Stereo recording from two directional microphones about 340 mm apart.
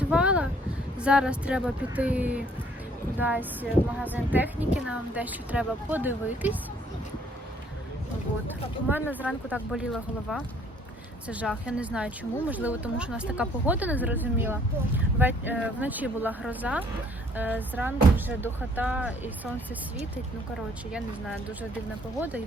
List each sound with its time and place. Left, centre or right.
0.1 s a sound: centre
0.9 s speech: centre
8.9 s speech: centre
20.9 s speech: centre